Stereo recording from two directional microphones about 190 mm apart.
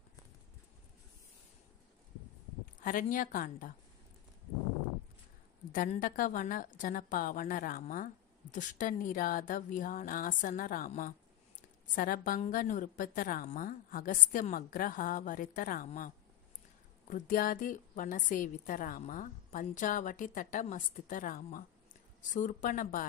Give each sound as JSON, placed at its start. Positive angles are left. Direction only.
{"t": 2.8, "sound": "a woman's voice", "side_deg": 45}
{"t": 5.7, "sound": "a woman's voice", "side_deg": 45}
{"t": 17.1, "sound": "a woman's voice", "side_deg": 50}